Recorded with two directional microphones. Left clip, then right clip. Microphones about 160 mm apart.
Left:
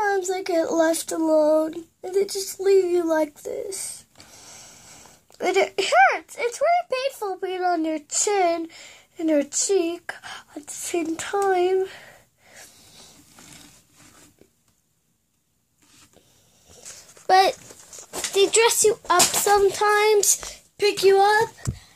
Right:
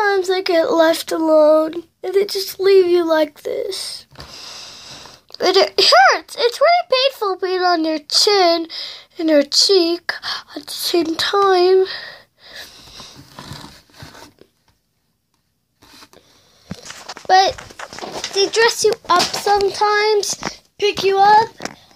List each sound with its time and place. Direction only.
0.0 s speech: 10° right (ahead or behind)
4.3 s a sound: 10° right (ahead or behind)
5.0 s speech: 20° right (ahead or behind)
9.7 s speech: 30° right (ahead or behind)
9.9 s speech: 15° right (ahead or behind)
10.9 s speech: 30° right (ahead or behind)
11.4 s a sound: 20° right (ahead or behind)
17.3 s speech: 15° left (ahead or behind)
17.8 s a sound: 25° right (ahead or behind)
18.3 s speech: 15° left (ahead or behind)